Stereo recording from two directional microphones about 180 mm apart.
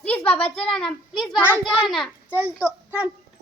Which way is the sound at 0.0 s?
10° left (ahead or behind).